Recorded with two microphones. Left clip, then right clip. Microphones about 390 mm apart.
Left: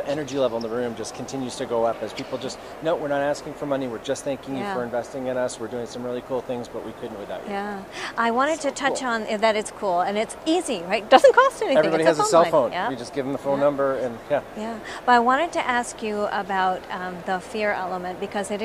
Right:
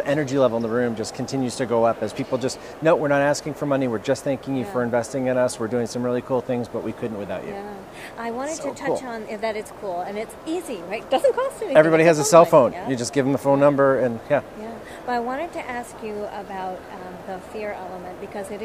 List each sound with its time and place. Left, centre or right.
0.0 s speech: right
4.7 s speech: right
8.2 s speech: left
11.7 s speech: right
12.9 s speech: right
14.3 s speech: right
15.0 s speech: left